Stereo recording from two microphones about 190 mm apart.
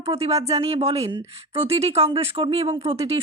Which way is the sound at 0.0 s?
30° right (ahead or behind).